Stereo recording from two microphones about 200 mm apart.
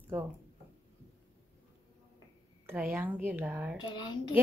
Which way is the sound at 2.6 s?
10° right (ahead or behind).